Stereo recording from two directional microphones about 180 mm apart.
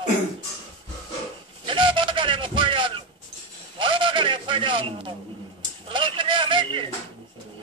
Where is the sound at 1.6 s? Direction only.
30° right (ahead or behind).